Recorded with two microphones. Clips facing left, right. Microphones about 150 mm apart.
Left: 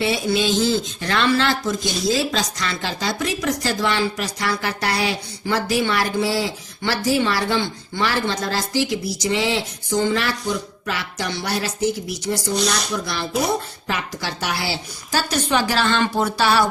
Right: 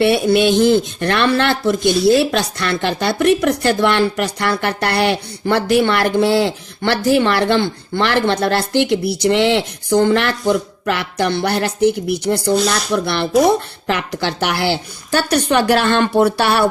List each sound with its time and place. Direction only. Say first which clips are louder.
0.0 s speech: right 7 dB; 60° right (ahead or behind)